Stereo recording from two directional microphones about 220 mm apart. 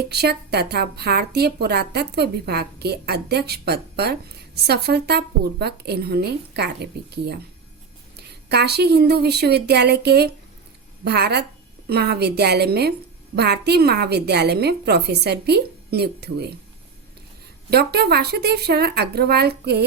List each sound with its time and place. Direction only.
0.0 s speech: 45° right (ahead or behind)
17.7 s speech: 45° right (ahead or behind)